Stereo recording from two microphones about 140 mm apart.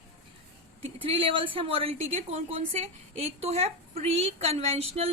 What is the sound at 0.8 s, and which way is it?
A woman's voice, 45° right (ahead or behind).